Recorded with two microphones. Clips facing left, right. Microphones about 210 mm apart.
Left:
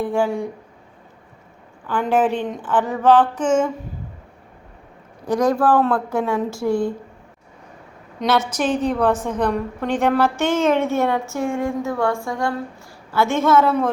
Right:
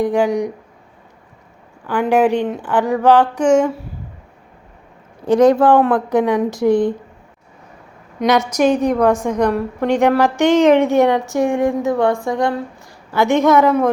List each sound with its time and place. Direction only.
0.0 s a woman's voice: 15° right (ahead or behind)
1.9 s a woman's voice: 10° right (ahead or behind)
5.2 s speech: 25° right (ahead or behind)
8.2 s a woman's voice: 10° right (ahead or behind)